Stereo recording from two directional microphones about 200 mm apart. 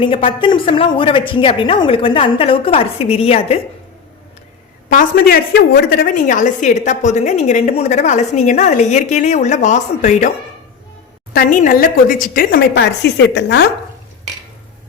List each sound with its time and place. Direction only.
0.0 s a woman's voice: 25° left (ahead or behind)
4.9 s a woman's voice: 45° left (ahead or behind)
11.3 s a woman's voice: 45° left (ahead or behind)